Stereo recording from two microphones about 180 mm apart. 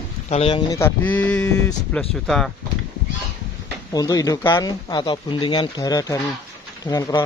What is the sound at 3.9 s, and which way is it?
Speech, 20° left (ahead or behind).